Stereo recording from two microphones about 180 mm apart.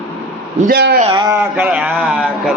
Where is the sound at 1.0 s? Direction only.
25° right (ahead or behind).